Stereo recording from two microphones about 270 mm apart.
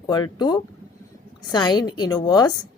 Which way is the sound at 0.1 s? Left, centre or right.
Centre.